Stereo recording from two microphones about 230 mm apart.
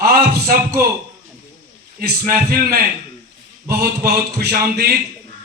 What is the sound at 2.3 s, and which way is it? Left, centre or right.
Speech, right.